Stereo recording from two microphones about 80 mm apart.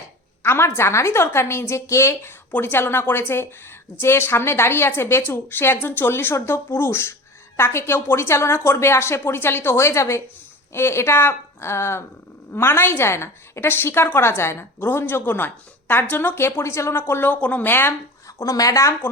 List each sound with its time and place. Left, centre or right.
0.4 s a woman's voice: left
18.3 s a woman's voice: left